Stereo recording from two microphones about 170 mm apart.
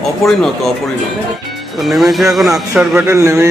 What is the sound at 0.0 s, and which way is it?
Speech, centre (ahead or behind).